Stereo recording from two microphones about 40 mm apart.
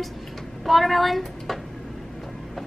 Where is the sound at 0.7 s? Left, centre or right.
Centre.